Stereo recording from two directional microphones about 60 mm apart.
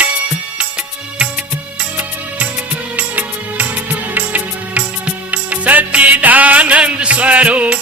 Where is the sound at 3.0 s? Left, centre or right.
Right.